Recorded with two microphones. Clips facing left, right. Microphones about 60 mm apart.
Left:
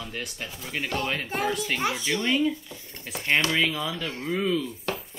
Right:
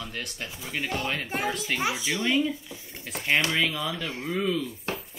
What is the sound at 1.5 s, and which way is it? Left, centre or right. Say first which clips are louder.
Speech: left 2 dB; centre.